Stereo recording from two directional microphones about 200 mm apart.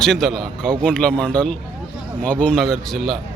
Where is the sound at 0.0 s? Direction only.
Centre (ahead or behind).